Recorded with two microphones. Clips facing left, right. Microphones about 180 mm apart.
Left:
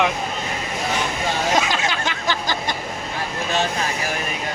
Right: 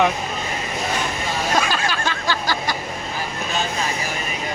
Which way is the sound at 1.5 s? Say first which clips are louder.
Even; 20° left (ahead or behind).